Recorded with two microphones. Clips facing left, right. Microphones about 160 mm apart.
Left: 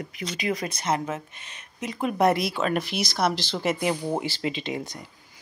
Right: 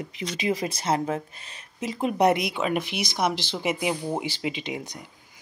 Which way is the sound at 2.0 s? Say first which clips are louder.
Even; 20° right (ahead or behind).